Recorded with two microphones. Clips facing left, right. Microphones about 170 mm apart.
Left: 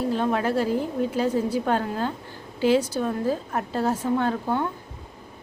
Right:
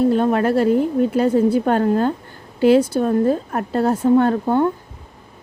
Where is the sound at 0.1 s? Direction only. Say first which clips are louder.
Right 7 dB; 55° right (ahead or behind).